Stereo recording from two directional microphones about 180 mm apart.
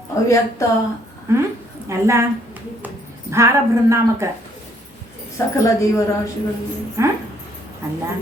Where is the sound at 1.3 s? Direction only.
15° right (ahead or behind).